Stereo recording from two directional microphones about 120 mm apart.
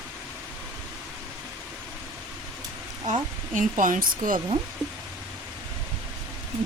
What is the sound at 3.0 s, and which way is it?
Speech, 80° right.